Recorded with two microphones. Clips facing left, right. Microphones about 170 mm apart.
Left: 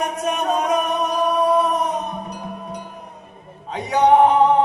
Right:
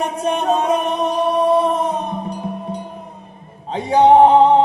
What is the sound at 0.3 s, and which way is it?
Music, 25° right (ahead or behind).